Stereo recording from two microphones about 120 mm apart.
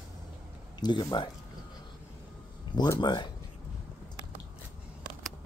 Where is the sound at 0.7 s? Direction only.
35° left (ahead or behind).